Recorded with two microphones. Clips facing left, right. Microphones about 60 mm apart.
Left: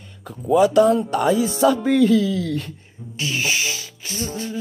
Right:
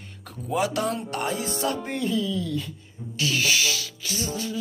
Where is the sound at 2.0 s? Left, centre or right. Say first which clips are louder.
Left 9 dB; left.